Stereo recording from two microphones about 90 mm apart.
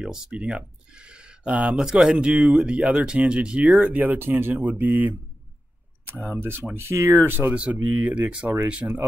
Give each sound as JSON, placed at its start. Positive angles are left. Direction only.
{"t": 0.0, "sound": "speech", "side_deg": -10}
{"t": 6.3, "sound": "speech", "side_deg": -20}